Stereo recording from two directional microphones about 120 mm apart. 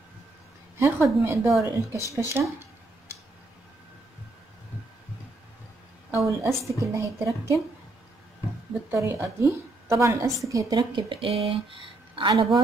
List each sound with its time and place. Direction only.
0.7 s a woman's voice: 20° right (ahead or behind)
6.1 s a woman's voice: 25° right (ahead or behind)
8.9 s a woman's voice: 20° right (ahead or behind)
10.7 s speech: 40° right (ahead or behind)